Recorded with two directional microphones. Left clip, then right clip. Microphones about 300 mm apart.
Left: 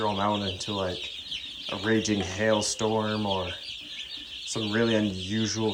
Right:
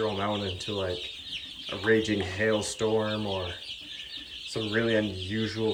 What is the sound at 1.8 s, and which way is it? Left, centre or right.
Speech, centre.